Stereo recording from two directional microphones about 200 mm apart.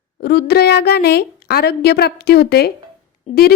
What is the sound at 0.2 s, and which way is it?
A woman's voice, 55° left (ahead or behind).